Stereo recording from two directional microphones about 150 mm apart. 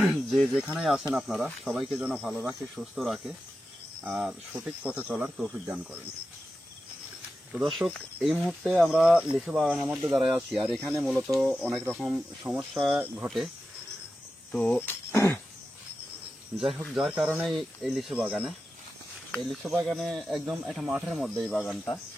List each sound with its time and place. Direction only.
0.1 s speech: centre (ahead or behind)
7.5 s speech: 5° right (ahead or behind)
10.8 s speech: 20° right (ahead or behind)
11.3 s speech: 5° right (ahead or behind)
14.5 s speech: 5° left (ahead or behind)
16.5 s speech: 5° right (ahead or behind)